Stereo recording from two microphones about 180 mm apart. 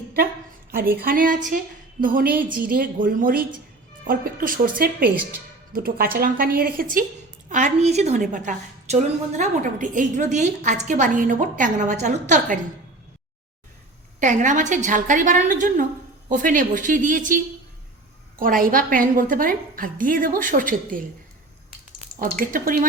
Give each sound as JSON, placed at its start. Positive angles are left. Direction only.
{"t": 1.0, "sound": "a woman's voice", "side_deg": -50}
{"t": 7.5, "sound": "a woman's voice", "side_deg": -40}
{"t": 14.2, "sound": "a woman's voice", "side_deg": -45}
{"t": 22.2, "sound": "a woman's voice", "side_deg": -50}